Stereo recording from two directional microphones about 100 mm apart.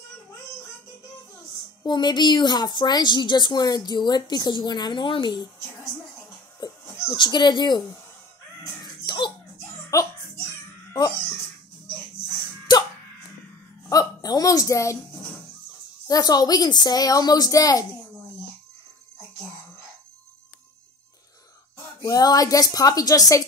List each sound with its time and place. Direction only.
1.5 s speech: 45° left (ahead or behind)
6.6 s speech: 40° left (ahead or behind)
8.8 s a sound: 45° left (ahead or behind)
9.9 s a woman's voice: 35° left (ahead or behind)
10.9 s music: 35° left (ahead or behind)
13.8 s speech: 40° left (ahead or behind)
16.1 s a woman's voice: 40° left (ahead or behind)
22.0 s a woman's voice: 40° left (ahead or behind)